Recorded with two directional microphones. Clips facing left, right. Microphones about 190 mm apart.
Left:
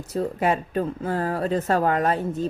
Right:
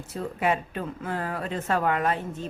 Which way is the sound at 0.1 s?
40° left (ahead or behind).